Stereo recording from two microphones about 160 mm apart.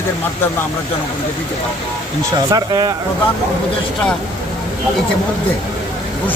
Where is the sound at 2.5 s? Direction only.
25° right (ahead or behind).